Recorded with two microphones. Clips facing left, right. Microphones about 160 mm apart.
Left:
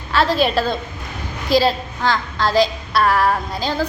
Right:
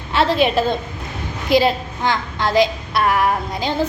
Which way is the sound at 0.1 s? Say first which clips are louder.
Right 1 dB; 25° right (ahead or behind).